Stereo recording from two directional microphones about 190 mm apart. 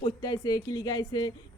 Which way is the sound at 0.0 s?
20° left (ahead or behind).